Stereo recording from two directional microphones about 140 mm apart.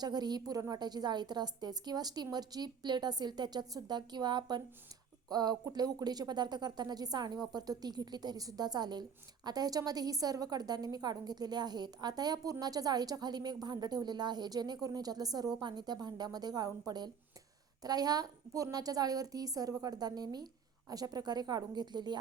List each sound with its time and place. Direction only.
0.0 s speech: 30° right (ahead or behind)